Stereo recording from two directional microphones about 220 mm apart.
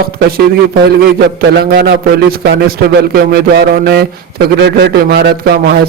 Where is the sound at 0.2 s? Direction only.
40° right (ahead or behind).